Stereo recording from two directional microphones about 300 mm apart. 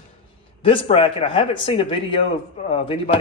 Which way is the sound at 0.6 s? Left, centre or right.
Centre.